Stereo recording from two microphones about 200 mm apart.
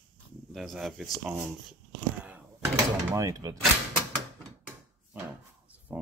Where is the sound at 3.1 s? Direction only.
15° right (ahead or behind).